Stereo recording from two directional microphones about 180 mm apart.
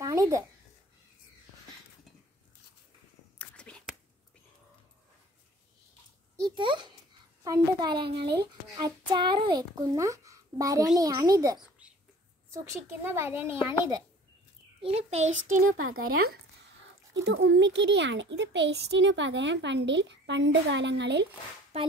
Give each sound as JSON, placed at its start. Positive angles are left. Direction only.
{"t": 0.0, "sound": "a sound", "side_deg": -20}
{"t": 3.3, "sound": "whispering", "side_deg": 5}
{"t": 6.5, "sound": "a child's voice", "side_deg": -25}
{"t": 8.0, "sound": "speech", "side_deg": -65}
{"t": 8.7, "sound": "a child's voice", "side_deg": -25}
{"t": 14.8, "sound": "a child's voice", "side_deg": -35}
{"t": 15.5, "sound": "speech", "side_deg": -55}
{"t": 17.1, "sound": "a child's voice", "side_deg": -75}
{"t": 21.7, "sound": "a child's voice", "side_deg": -35}